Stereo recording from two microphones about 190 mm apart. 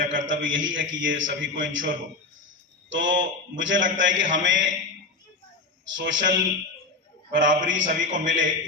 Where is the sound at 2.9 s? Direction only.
80° right.